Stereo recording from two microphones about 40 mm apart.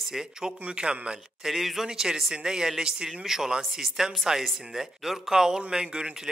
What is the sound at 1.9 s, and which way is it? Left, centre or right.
A man's voice, centre.